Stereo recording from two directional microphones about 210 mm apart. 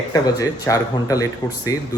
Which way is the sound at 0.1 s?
15° left (ahead or behind).